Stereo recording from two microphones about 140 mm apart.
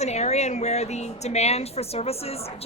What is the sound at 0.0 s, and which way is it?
A woman's voice, 50° left (ahead or behind).